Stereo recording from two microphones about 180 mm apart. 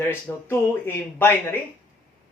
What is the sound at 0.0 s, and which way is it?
Speech, 10° left (ahead or behind).